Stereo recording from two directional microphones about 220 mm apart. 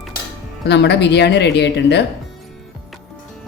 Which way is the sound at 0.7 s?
50° left (ahead or behind).